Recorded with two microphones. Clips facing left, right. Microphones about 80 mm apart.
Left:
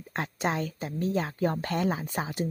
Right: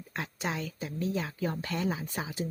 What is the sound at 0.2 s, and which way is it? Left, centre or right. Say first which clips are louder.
Speech: left 5 dB; left.